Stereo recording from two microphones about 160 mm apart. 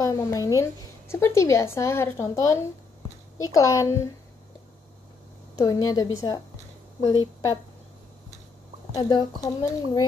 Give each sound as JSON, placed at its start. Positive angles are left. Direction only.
{"t": 0.0, "sound": "a woman's voice", "side_deg": 20}
{"t": 5.6, "sound": "a woman's voice", "side_deg": 20}
{"t": 8.9, "sound": "a woman's voice", "side_deg": 25}